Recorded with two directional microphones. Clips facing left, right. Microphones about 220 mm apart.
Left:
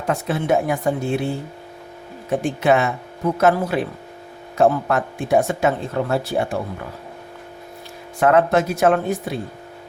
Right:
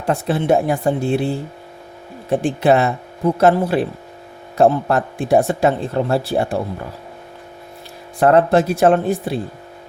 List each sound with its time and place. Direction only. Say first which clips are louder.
0.0 s speech: right 3 dB; 30° right (ahead or behind)
2.3 s speech: right 3 dB; 30° right (ahead or behind)
8.2 s speech: right 3 dB; 35° right (ahead or behind)